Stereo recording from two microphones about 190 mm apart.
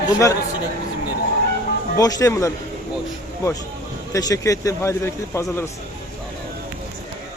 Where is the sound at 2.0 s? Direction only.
20° left (ahead or behind).